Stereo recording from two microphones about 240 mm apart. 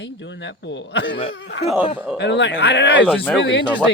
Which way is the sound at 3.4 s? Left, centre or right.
Left.